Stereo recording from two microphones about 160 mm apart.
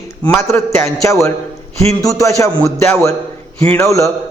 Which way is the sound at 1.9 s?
20° left (ahead or behind).